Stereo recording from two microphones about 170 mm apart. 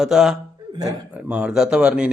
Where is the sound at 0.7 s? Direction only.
20° right (ahead or behind).